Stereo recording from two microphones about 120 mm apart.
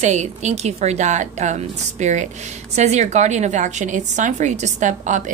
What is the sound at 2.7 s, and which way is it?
A woman's voice, 70° right (ahead or behind).